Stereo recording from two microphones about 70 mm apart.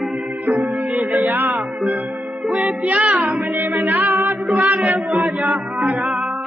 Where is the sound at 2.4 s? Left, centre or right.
Centre.